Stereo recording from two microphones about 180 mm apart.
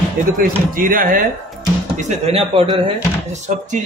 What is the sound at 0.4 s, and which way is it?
Speech, 50° right (ahead or behind).